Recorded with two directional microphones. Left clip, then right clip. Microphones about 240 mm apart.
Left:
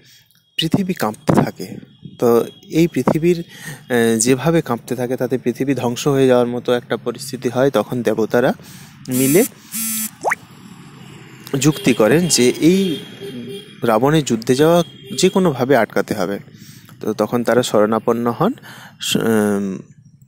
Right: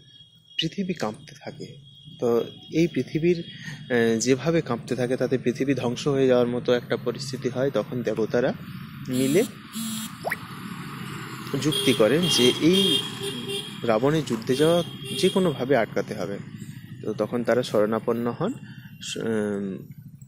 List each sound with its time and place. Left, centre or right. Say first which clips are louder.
0.6 s speech: left 8 dB; left
11.8 s speech: left 5 dB; left